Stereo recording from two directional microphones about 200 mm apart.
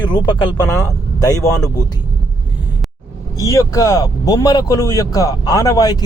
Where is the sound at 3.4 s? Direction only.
15° left (ahead or behind).